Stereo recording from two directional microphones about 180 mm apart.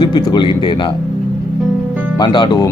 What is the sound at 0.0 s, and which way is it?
Speech, 25° left (ahead or behind).